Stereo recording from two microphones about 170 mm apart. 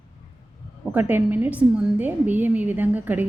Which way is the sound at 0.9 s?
10° right (ahead or behind).